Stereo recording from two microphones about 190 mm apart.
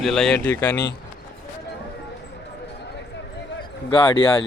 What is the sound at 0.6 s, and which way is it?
Speech, 20° left (ahead or behind).